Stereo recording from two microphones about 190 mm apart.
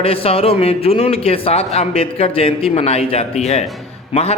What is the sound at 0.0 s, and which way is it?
A man's voice, 30° left (ahead or behind).